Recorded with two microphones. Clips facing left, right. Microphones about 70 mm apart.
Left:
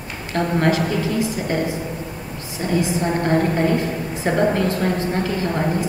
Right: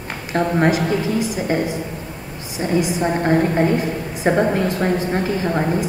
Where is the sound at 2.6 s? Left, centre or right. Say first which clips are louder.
Right 2 dB; centre.